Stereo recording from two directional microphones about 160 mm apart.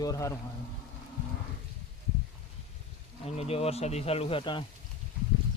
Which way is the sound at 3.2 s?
40° left (ahead or behind).